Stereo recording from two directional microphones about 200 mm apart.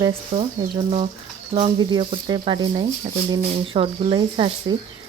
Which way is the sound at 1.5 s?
30° right (ahead or behind).